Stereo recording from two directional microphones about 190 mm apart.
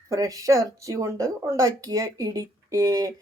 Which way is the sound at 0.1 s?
15° right (ahead or behind).